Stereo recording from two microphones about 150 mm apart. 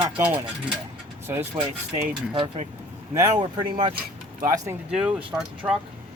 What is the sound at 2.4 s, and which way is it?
Speech, 45° right (ahead or behind).